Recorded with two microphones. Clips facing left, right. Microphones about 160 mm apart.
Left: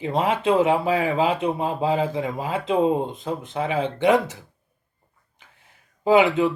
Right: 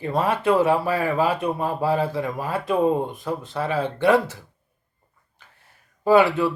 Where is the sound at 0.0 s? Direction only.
20° left (ahead or behind).